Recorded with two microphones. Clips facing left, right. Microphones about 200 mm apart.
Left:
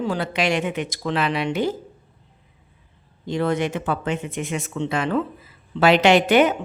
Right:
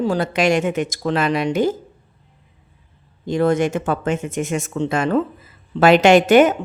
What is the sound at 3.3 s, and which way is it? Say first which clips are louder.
A woman's voice: right 5 dB; 45° right (ahead or behind).